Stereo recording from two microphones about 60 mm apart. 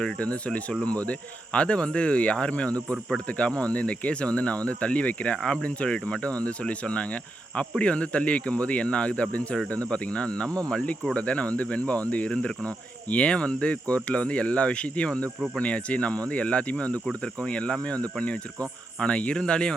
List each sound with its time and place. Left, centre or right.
0.2 s speech: left
5.4 s speech: centre
5.6 s speech: centre